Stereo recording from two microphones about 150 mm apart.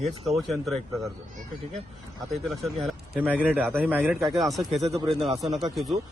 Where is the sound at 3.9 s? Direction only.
10° right (ahead or behind).